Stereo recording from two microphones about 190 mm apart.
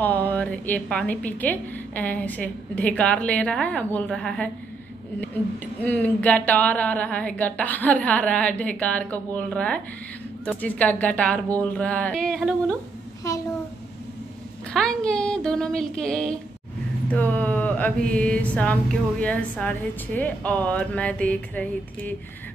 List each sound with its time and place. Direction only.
0.0 s mantra: 10° left (ahead or behind)
5.8 s mantra: 10° left (ahead or behind)
13.2 s a sound: 15° left (ahead or behind)
14.7 s speech: 5° left (ahead or behind)
17.1 s mantra: 10° left (ahead or behind)